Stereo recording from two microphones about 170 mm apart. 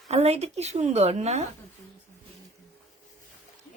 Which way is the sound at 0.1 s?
40° right (ahead or behind).